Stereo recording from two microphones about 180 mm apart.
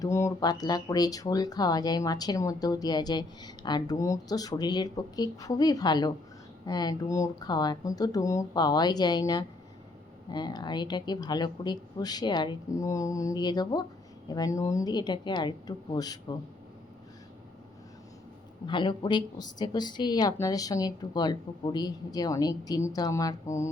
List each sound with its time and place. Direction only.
0.0 s speech: 15° left (ahead or behind)
18.6 s speech: 25° left (ahead or behind)